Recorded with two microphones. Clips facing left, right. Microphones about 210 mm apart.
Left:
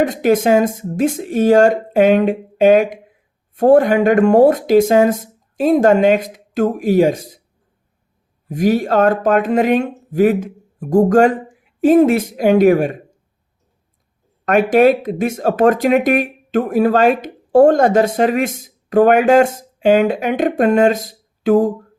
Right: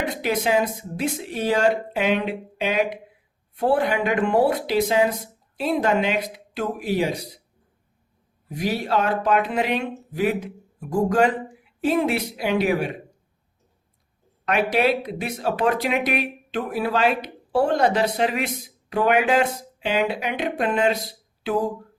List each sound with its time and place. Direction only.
0.0 s speech: 45° left (ahead or behind)
8.4 s speech: 45° left (ahead or behind)
14.4 s speech: 45° left (ahead or behind)